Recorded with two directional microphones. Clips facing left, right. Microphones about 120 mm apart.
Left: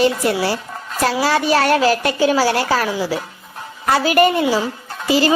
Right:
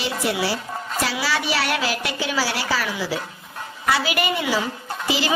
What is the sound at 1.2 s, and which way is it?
A woman's voice, 45° left (ahead or behind).